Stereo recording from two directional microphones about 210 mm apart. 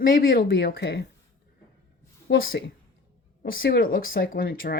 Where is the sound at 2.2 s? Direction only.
45° left (ahead or behind).